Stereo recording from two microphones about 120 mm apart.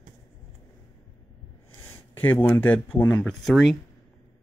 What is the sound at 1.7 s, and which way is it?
Speech, 20° left (ahead or behind).